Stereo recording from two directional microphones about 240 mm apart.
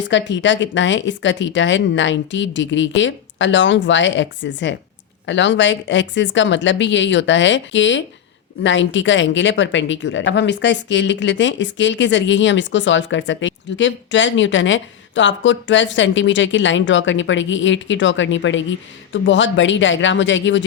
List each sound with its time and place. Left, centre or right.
0.1 s a woman's voice: left